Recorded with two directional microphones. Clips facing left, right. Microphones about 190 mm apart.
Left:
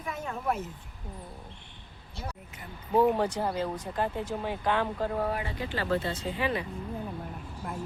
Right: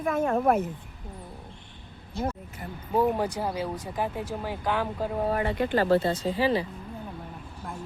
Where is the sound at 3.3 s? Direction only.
10° right (ahead or behind).